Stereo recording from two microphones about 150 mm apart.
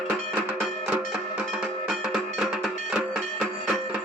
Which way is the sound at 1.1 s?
5° right (ahead or behind).